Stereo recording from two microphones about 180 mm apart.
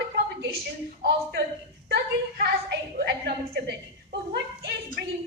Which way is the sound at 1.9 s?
60° right (ahead or behind).